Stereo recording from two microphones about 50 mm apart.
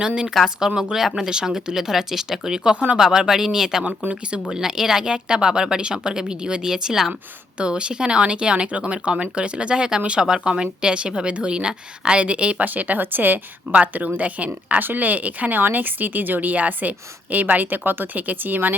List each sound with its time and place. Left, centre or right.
0.0 s speech: centre
7.6 s a woman's voice: right